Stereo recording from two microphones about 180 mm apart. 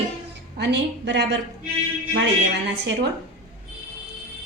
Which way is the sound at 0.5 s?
70° right (ahead or behind).